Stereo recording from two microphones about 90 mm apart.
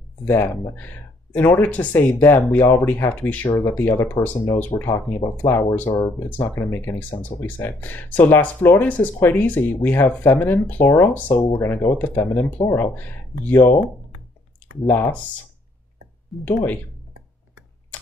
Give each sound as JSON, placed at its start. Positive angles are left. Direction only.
{"t": 0.2, "sound": "speech", "side_deg": 20}
{"t": 14.9, "sound": "speech", "side_deg": 15}
{"t": 16.4, "sound": "speech", "side_deg": 20}